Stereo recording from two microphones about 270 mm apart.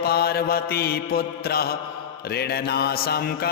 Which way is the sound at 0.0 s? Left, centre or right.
Left.